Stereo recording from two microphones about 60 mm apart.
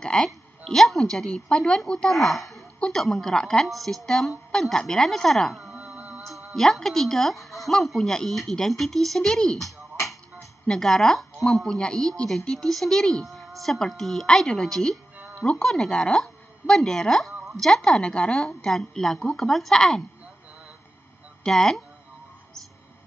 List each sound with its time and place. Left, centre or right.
0.0 s a woman's voice: centre
5.9 s music: right
6.5 s speech: centre
10.0 s a sound: centre
11.6 s speech: centre
21.5 s speech: centre